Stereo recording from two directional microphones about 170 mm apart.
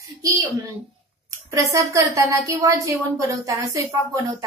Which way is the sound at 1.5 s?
20° right (ahead or behind).